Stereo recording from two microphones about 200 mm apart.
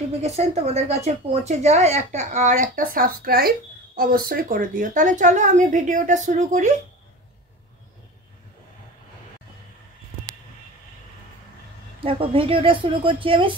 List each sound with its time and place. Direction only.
0.4 s speech: 35° right (ahead or behind)
12.0 s a woman's voice: 25° right (ahead or behind)